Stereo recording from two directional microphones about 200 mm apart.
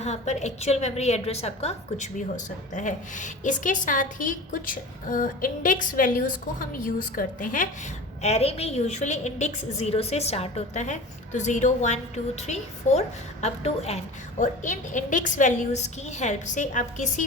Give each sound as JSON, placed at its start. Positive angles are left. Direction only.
{"t": 0.0, "sound": "a woman's voice", "side_deg": 35}